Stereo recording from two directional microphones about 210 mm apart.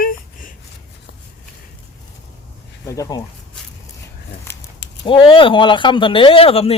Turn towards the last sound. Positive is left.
turn(degrees=30)  # may be behind; listen again after turning